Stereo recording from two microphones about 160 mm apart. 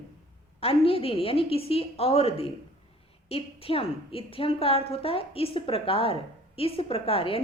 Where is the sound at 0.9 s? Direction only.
35° left (ahead or behind).